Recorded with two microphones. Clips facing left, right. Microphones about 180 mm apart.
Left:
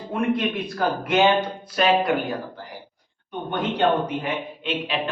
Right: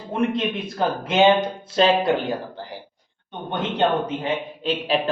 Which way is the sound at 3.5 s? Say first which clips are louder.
Even; 25° right (ahead or behind).